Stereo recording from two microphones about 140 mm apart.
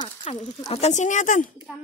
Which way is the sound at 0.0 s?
35° left (ahead or behind).